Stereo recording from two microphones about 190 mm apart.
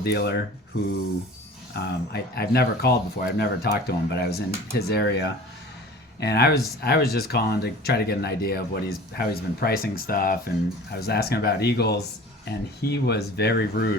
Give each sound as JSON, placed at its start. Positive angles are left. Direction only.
{"t": 0.0, "sound": "speech", "side_deg": 60}
{"t": 1.7, "sound": "speech", "side_deg": 60}